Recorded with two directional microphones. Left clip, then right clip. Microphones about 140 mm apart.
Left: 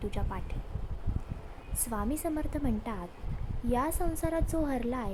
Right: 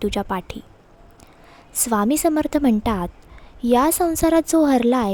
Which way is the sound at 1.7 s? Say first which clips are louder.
Right 15 dB; 90° right.